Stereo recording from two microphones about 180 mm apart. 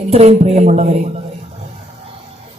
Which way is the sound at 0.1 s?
35° right (ahead or behind).